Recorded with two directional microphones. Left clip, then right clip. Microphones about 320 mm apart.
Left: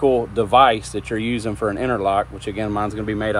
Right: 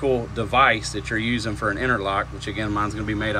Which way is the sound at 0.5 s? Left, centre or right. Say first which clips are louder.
Left 4 dB; left.